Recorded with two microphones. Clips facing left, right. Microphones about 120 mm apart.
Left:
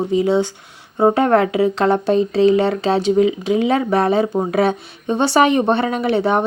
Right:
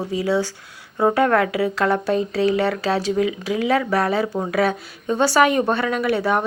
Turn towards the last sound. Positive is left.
turn(degrees=25)  # may be behind; listen again after turning